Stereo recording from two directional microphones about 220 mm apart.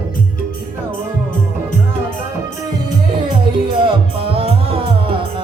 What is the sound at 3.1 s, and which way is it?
Music, 20° right (ahead or behind).